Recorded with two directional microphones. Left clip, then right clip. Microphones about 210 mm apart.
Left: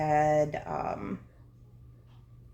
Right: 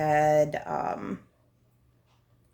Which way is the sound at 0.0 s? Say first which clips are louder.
Right 3 dB; 30° right (ahead or behind).